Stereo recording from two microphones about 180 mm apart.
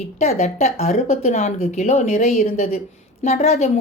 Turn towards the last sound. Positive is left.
turn(degrees=40)  # may be behind; listen again after turning